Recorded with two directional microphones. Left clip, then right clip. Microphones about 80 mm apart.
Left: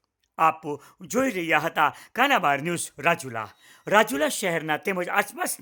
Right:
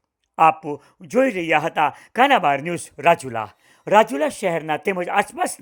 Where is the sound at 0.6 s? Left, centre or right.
Centre.